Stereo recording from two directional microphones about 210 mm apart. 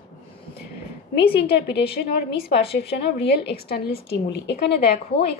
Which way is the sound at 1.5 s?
55° left (ahead or behind).